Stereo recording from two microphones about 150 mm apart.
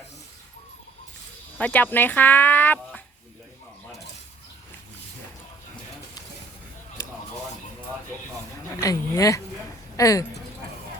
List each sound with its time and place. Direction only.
1.5 s speech: 10° left (ahead or behind)
8.7 s speech: 20° left (ahead or behind)